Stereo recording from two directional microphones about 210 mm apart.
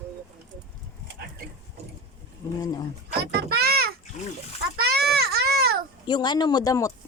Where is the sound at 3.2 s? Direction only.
50° right (ahead or behind).